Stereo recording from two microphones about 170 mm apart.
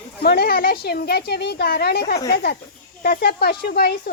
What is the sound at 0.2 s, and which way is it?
A woman's voice, 70° left (ahead or behind).